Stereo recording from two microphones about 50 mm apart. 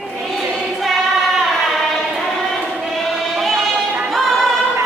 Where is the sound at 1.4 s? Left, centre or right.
Centre.